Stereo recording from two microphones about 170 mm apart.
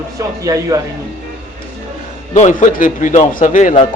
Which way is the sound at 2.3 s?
45° left (ahead or behind).